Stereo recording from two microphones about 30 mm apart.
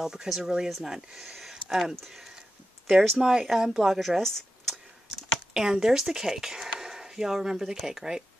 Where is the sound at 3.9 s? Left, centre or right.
Centre.